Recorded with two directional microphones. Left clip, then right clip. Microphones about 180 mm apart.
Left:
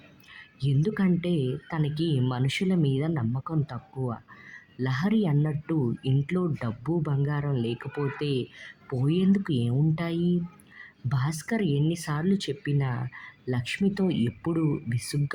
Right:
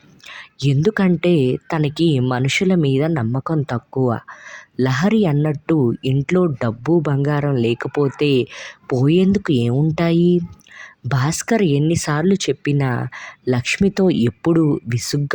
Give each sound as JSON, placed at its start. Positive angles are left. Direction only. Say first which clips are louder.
{"t": 0.3, "sound": "speech", "louder": "right 12 dB", "side_deg": -45}